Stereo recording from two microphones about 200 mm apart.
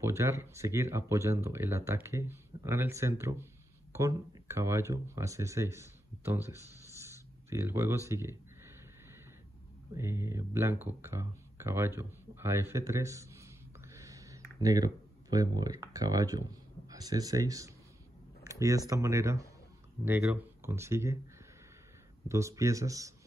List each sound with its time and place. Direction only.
0.0 s speech: 15° right (ahead or behind)
9.9 s speech: 15° right (ahead or behind)
18.4 s a sound: 15° right (ahead or behind)
18.9 s speech: 15° right (ahead or behind)
22.3 s speech: 15° right (ahead or behind)